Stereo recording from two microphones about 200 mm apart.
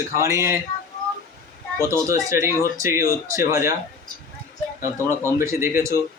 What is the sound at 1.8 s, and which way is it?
Speech, 15° right (ahead or behind).